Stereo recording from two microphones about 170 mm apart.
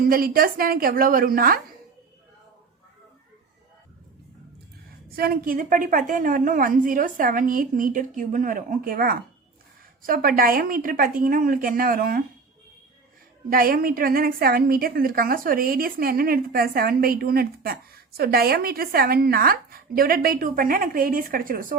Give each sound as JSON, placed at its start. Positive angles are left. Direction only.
{"t": 0.0, "sound": "a woman's voice", "side_deg": -60}
{"t": 5.0, "sound": "a woman's voice", "side_deg": -60}
{"t": 13.5, "sound": "a woman's voice", "side_deg": -60}